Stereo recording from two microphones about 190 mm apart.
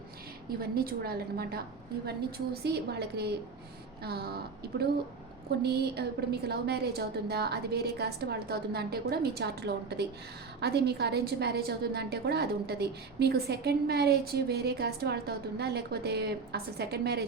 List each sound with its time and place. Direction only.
0.6 s a woman's voice: 50° right (ahead or behind)